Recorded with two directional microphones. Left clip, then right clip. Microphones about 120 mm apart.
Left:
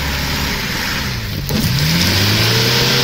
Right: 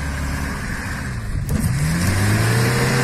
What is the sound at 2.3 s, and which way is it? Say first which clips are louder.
Vehicle: left 7 dB; 45° left (ahead or behind).